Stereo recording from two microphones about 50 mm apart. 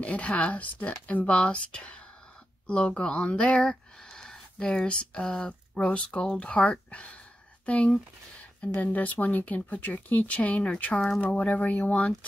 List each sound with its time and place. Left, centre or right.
0.0 s speech: left
4.1 s a sound: centre
4.8 s speech: centre
11.2 s speech: left